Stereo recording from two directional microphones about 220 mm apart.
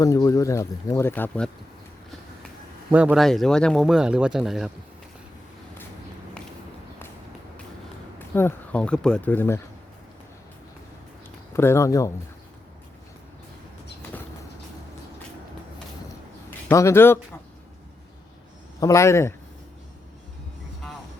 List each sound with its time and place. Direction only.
0.0 s speech: 15° left (ahead or behind)
2.9 s speech: 5° right (ahead or behind)
8.4 s speech: 10° left (ahead or behind)
11.5 s speech: 10° left (ahead or behind)
16.6 s speech: 10° left (ahead or behind)
18.8 s speech: 15° left (ahead or behind)